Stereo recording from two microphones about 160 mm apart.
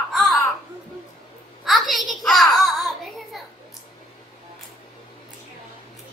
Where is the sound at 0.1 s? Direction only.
Centre (ahead or behind).